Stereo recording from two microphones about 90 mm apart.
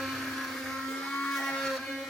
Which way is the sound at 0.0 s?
Centre (ahead or behind).